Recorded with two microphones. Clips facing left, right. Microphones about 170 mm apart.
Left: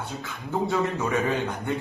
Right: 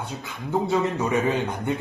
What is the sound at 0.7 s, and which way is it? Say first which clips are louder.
A man's voice: right 2 dB; 20° right (ahead or behind).